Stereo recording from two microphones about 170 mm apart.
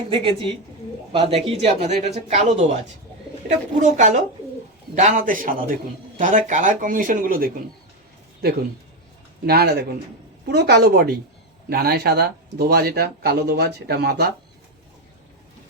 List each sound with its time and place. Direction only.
0.1 s speech: 30° right (ahead or behind)
3.8 s speech: 45° right (ahead or behind)
9.5 s speech: 70° right (ahead or behind)